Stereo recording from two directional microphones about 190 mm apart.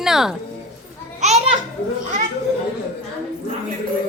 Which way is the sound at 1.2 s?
35° right (ahead or behind).